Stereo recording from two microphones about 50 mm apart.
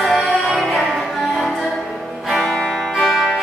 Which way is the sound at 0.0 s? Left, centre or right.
Centre.